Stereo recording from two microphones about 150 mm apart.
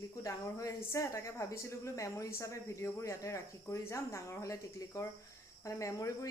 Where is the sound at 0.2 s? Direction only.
20° left (ahead or behind).